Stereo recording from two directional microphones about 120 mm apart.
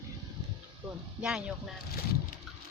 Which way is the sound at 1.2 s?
5° right (ahead or behind).